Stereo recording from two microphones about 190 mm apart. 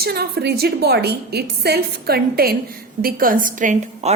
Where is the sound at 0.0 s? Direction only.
55° right (ahead or behind).